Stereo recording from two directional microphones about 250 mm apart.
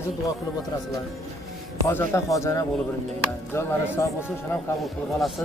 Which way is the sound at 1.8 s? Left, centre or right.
Centre.